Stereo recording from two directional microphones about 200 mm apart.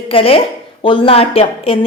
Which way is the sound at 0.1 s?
30° left (ahead or behind).